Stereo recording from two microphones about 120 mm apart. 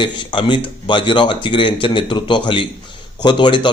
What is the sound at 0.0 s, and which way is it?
A man's voice, 45° left (ahead or behind).